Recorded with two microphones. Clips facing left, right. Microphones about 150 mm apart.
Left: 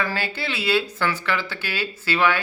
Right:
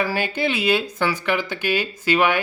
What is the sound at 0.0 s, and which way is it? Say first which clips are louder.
Speech: right 5 dB; 15° right (ahead or behind).